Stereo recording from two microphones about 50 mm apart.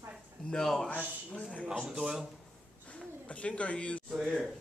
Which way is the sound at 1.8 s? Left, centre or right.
Centre.